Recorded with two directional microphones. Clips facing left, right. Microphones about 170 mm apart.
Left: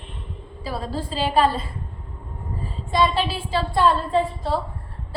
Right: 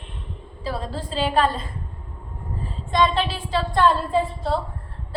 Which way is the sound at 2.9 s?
5° left (ahead or behind).